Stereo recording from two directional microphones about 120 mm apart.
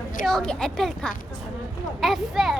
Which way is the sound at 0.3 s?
5° left (ahead or behind).